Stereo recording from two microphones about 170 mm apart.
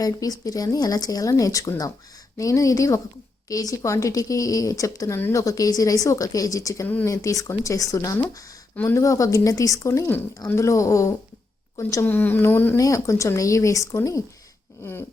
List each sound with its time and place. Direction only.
0.0 s a woman's voice: 20° left (ahead or behind)